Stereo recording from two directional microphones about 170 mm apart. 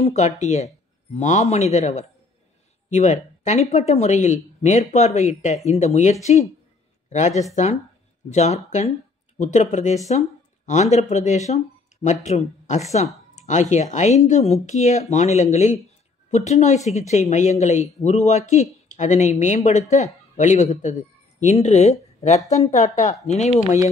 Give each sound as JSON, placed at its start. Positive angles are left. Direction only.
{"t": 0.0, "sound": "speech", "side_deg": 40}